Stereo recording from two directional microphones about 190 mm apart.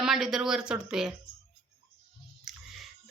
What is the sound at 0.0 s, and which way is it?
Speech, centre (ahead or behind).